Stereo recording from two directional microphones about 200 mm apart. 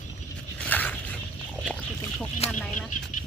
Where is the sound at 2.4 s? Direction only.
30° left (ahead or behind).